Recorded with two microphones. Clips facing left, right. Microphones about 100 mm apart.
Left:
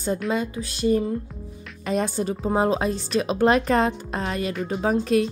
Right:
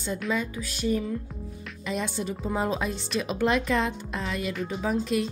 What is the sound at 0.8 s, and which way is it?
Speech, 40° left (ahead or behind).